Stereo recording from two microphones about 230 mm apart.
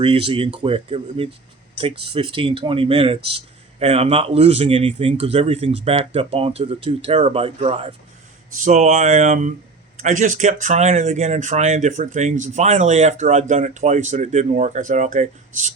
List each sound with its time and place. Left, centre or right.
0.0 s speech: right